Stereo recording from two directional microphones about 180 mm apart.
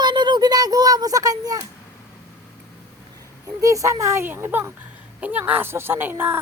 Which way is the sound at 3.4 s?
20° right (ahead or behind).